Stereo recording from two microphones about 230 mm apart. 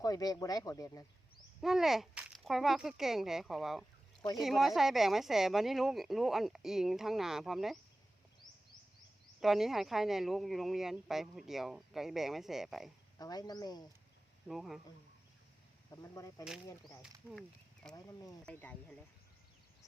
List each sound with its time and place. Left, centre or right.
0.0 s speech: centre
1.6 s speech: centre
9.4 s speech: centre
13.1 s speech: centre
14.4 s speech: centre
15.9 s speech: centre
17.9 s speech: centre